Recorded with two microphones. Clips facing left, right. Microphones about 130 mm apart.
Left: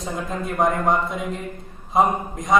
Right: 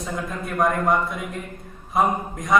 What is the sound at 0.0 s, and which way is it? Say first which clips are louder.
A man's voice: left 2 dB; 20° left (ahead or behind).